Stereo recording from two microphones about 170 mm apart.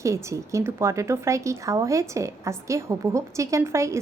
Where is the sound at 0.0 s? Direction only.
15° right (ahead or behind).